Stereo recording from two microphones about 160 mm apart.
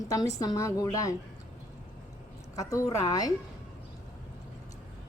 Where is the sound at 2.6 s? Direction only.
20° left (ahead or behind).